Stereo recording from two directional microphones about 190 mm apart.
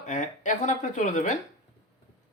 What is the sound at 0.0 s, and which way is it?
Speech, 40° left (ahead or behind).